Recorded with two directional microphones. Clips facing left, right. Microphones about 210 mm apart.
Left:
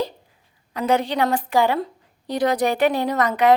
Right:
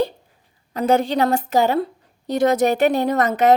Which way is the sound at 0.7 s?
45° right (ahead or behind).